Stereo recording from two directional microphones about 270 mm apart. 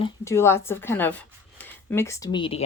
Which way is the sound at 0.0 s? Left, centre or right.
Centre.